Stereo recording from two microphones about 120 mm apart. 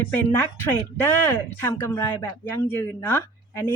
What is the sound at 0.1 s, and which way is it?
A woman's voice, 15° left (ahead or behind).